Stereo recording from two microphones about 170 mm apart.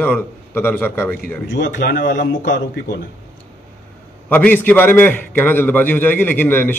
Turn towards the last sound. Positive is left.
turn(degrees=10)  # may be behind; listen again after turning